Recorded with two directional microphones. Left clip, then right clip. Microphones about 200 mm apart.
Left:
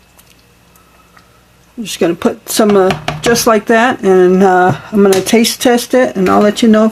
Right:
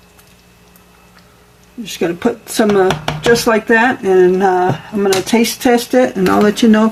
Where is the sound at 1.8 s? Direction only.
45° left (ahead or behind).